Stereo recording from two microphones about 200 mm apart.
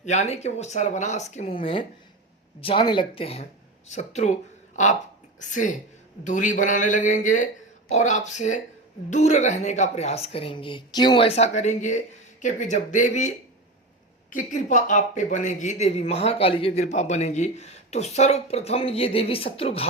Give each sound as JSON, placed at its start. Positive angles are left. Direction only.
{"t": 0.0, "sound": "speech", "side_deg": 35}